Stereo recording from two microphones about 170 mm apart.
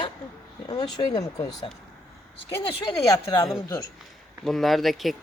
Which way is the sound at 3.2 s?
25° left (ahead or behind).